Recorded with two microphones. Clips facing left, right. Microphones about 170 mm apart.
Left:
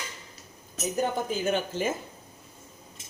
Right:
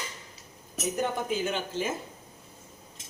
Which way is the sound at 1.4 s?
50° left (ahead or behind).